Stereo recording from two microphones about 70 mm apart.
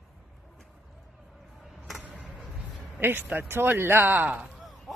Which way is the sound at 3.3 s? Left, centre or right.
Right.